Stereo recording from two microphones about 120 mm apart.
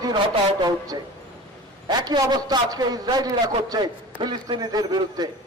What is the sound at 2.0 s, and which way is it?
A man's voice, 35° right (ahead or behind).